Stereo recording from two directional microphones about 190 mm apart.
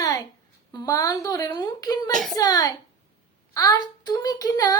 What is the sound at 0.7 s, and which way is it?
A woman's voice, 20° left (ahead or behind).